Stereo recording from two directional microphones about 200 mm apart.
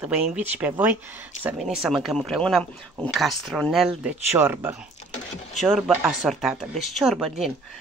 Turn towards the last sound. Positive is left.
turn(degrees=0)  # may be behind; listen again after turning